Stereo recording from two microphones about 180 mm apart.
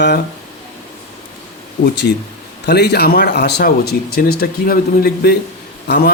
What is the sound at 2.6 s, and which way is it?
Speech, 65° left (ahead or behind).